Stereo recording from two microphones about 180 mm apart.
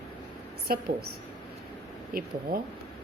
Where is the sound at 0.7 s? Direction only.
55° right (ahead or behind).